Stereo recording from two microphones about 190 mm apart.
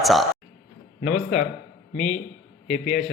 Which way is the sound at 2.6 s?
40° left (ahead or behind).